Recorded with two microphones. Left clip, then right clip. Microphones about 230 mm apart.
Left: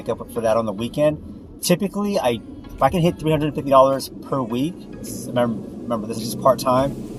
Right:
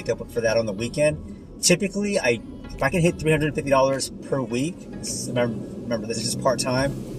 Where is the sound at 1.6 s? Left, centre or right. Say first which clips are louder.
Even; centre.